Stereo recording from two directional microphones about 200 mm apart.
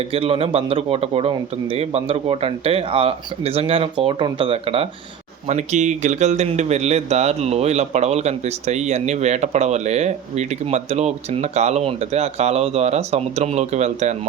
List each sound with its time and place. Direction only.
0.1 s speech: 30° right (ahead or behind)